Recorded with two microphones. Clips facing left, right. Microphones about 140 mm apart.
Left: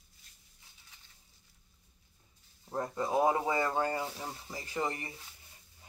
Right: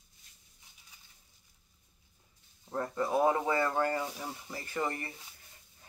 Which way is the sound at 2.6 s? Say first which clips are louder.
Right 1 dB; 15° left (ahead or behind).